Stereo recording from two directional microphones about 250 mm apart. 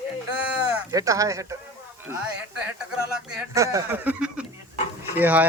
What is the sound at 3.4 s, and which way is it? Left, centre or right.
Speech, centre.